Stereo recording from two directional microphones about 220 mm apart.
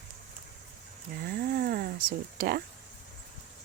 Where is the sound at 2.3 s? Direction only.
40° right (ahead or behind).